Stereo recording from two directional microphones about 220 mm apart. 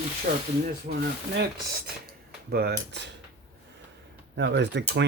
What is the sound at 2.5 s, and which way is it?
Speech, 45° right (ahead or behind).